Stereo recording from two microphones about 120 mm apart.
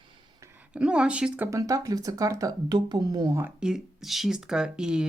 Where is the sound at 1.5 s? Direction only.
30° right (ahead or behind).